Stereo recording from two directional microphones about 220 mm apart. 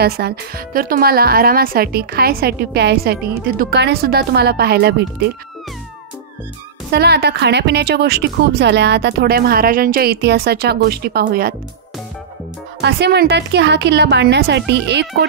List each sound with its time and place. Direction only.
0.0 s a woman's voice: 45° right (ahead or behind)
6.9 s a woman's voice: 45° right (ahead or behind)
12.8 s a woman's voice: 50° right (ahead or behind)